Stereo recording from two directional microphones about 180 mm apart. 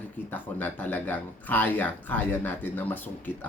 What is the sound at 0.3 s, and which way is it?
Speech, 10° left (ahead or behind).